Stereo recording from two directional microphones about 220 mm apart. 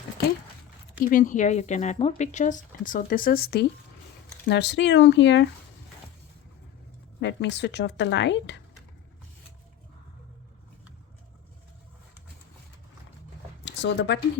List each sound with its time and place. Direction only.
0.9 s speech: 35° left (ahead or behind); by 5.5 s 55° left (ahead or behind)
7.2 s speech: 50° left (ahead or behind)
13.7 s speech: 55° left (ahead or behind)